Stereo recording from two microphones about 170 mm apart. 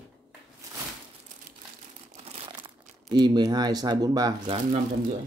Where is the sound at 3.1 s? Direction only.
25° right (ahead or behind).